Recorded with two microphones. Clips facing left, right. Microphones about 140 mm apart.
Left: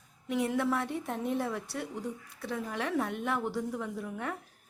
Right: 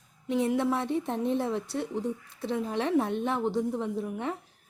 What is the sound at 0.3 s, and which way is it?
A woman's voice, 25° right (ahead or behind).